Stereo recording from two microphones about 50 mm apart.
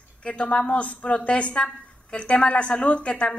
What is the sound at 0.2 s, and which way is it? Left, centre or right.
A woman's voice, left.